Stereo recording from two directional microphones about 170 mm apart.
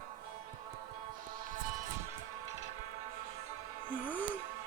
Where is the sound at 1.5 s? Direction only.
50° right (ahead or behind).